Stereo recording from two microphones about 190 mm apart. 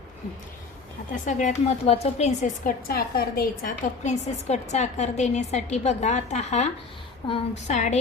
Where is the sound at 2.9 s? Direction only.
50° left (ahead or behind); by 6.6 s 35° left (ahead or behind).